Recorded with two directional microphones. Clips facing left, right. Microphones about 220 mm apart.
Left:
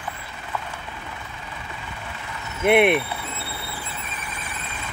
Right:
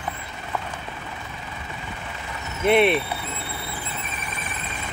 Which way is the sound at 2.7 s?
15° left (ahead or behind).